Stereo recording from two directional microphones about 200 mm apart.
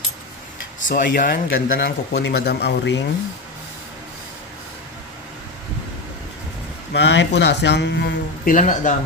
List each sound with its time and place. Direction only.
0.8 s speech: 40° left (ahead or behind); by 3.0 s 60° left (ahead or behind)
6.9 s speech: 60° left (ahead or behind)
8.5 s speech: 40° left (ahead or behind)